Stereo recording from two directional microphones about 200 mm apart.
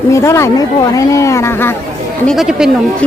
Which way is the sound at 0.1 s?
15° left (ahead or behind).